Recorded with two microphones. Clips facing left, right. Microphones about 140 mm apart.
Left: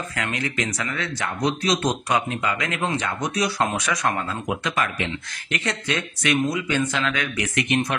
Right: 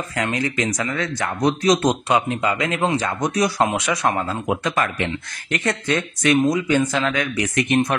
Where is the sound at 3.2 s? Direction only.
45° right (ahead or behind).